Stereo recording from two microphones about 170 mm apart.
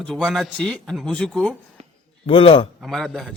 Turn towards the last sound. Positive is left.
turn(degrees=0)  # may be behind; listen again after turning